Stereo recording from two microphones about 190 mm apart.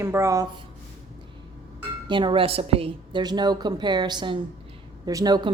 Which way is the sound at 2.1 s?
25° right (ahead or behind).